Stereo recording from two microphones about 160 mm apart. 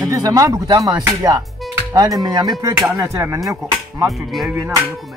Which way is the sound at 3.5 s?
20° right (ahead or behind).